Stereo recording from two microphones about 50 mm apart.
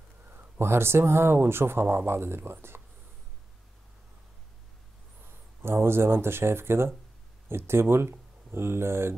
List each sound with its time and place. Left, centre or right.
0.6 s speech: right
5.6 s speech: right